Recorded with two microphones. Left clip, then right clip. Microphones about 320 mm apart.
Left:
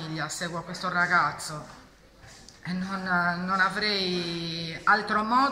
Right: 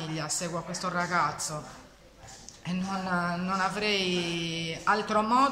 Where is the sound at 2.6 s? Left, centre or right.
Centre.